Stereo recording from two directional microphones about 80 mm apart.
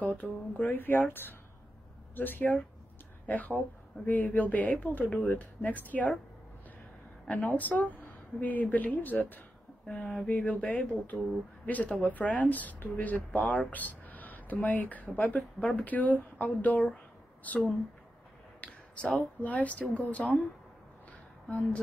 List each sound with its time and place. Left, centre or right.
0.0 s speech: centre
7.2 s speech: centre
9.8 s speech: centre
18.6 s speech: centre
21.5 s speech: centre